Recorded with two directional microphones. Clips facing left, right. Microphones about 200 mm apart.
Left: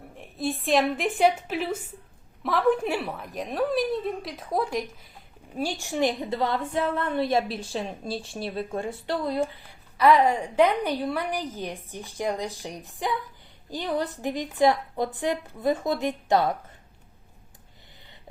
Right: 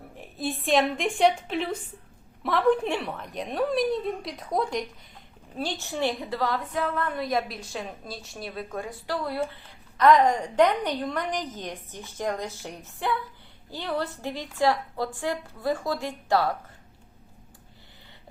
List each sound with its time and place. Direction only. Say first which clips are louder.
0.2 s a woman's voice: left 2 dB; centre (ahead or behind); by 9.5 s 20° left (ahead or behind)
10.0 s a woman's voice: even; 10° left (ahead or behind)